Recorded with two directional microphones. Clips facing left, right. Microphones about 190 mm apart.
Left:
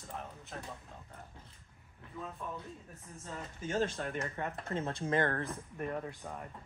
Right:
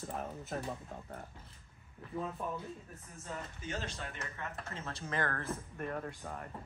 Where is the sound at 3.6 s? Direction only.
45° left (ahead or behind).